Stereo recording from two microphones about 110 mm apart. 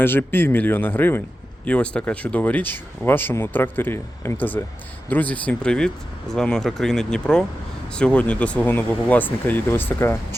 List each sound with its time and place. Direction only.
0.0 s speech: 20° left (ahead or behind)